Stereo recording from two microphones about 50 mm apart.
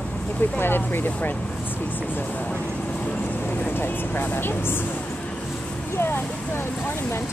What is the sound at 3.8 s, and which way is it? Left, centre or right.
Speech, left.